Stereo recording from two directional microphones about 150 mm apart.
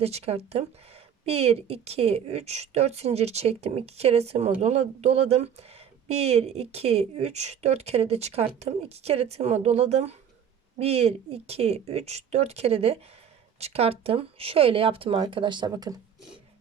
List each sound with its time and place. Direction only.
0.0 s speech: 45° right (ahead or behind); by 16.0 s 25° right (ahead or behind)